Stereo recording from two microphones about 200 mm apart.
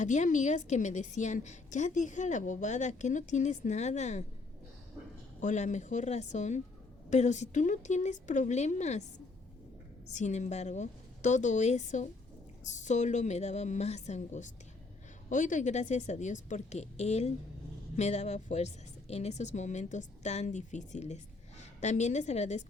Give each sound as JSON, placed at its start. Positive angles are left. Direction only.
{"t": 0.0, "sound": "a woman's voice", "side_deg": 35}
{"t": 5.4, "sound": "a woman's voice", "side_deg": 35}
{"t": 10.1, "sound": "a woman's voice", "side_deg": 35}